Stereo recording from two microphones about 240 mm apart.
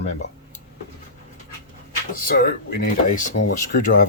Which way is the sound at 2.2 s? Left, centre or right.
Left.